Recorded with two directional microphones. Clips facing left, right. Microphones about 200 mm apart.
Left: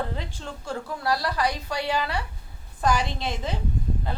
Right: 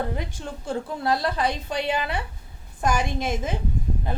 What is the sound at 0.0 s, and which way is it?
A woman's voice, 15° right (ahead or behind).